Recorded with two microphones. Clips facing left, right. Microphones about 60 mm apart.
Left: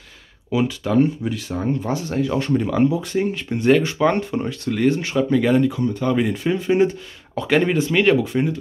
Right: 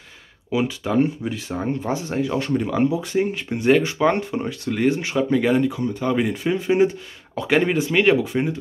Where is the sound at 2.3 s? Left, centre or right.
Centre.